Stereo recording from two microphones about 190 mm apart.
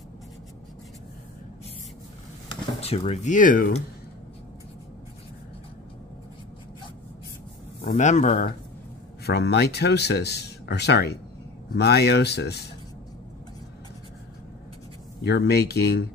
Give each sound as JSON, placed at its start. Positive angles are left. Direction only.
{"t": 2.5, "sound": "speech", "side_deg": 30}
{"t": 7.8, "sound": "speech", "side_deg": 40}
{"t": 9.2, "sound": "speech", "side_deg": 60}
{"t": 15.2, "sound": "speech", "side_deg": 60}